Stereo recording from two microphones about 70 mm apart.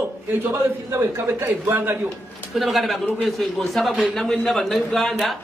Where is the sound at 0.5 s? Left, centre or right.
Right.